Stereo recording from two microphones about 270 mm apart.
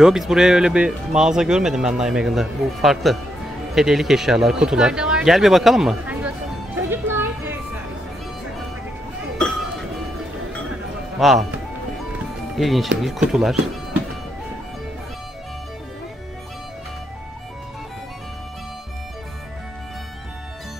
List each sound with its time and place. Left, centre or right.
0.0 s speech: centre
3.7 s a sound: centre
11.1 s speech: centre
12.5 s speech: centre